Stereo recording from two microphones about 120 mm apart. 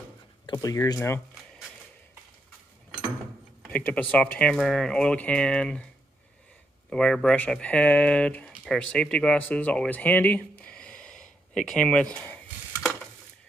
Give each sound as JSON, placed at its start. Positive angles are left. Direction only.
{"t": 0.5, "sound": "speech", "side_deg": 30}
{"t": 3.7, "sound": "speech", "side_deg": 10}
{"t": 6.9, "sound": "speech", "side_deg": 5}